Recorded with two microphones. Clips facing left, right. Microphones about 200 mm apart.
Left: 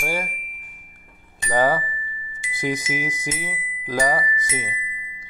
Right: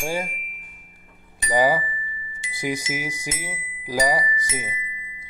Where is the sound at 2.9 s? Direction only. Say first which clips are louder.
Left 2 dB; 10° right (ahead or behind).